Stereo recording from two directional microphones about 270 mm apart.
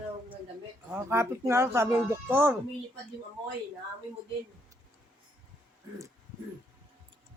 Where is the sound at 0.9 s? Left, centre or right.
Centre.